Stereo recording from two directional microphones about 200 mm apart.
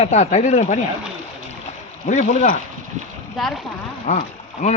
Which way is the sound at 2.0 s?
40° left (ahead or behind).